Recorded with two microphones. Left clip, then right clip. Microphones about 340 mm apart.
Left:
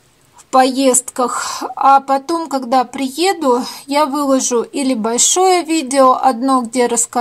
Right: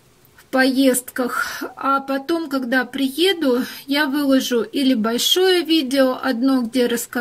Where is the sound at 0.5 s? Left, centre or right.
Centre.